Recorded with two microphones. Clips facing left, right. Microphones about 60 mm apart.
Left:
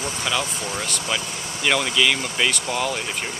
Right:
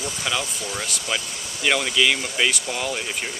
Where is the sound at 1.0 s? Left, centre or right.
Centre.